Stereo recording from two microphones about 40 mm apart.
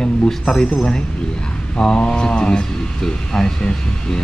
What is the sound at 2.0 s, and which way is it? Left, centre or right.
Speech, left.